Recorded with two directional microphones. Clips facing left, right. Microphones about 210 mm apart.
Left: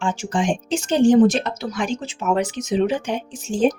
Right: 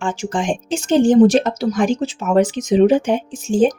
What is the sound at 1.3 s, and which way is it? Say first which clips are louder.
Speech: right 8 dB; 45° right (ahead or behind).